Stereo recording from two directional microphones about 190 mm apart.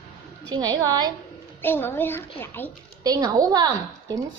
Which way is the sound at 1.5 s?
10° left (ahead or behind).